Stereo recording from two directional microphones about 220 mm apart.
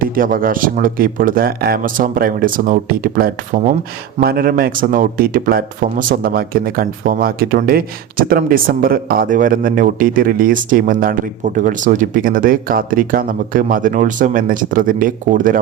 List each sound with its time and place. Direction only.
0.0 s speech: 40° right (ahead or behind)